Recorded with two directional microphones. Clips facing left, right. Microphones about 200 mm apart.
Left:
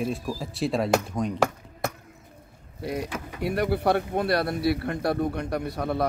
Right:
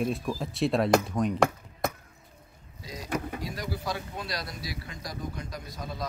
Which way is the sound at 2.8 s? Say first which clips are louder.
Left 3 dB; 60° left (ahead or behind).